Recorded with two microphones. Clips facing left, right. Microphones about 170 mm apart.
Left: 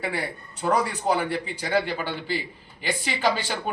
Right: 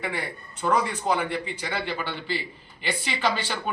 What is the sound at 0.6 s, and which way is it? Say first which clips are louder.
Speech: left 1 dB; 40° left (ahead or behind).